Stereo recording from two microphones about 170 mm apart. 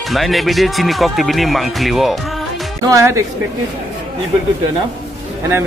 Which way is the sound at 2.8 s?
20° right (ahead or behind).